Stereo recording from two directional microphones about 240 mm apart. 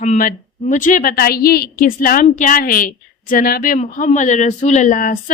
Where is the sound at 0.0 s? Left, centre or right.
Left.